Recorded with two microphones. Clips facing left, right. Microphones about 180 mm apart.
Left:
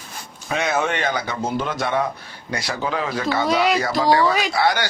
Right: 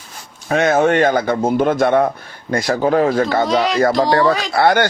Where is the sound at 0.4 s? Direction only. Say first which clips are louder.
Right 8 dB; 50° right (ahead or behind).